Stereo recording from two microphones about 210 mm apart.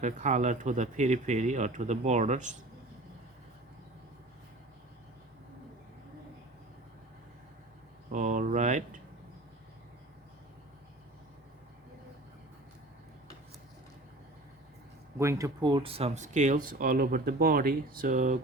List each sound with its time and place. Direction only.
0.0 s speech: 35° right (ahead or behind)
8.1 s speech: 35° right (ahead or behind)
15.2 s speech: 15° right (ahead or behind); by 18.3 s 35° right (ahead or behind)